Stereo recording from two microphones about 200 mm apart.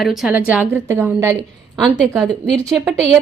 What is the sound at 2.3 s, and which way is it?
Speech, 5° left (ahead or behind).